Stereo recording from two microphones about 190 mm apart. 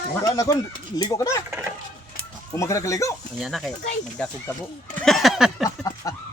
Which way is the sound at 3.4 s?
Centre (ahead or behind).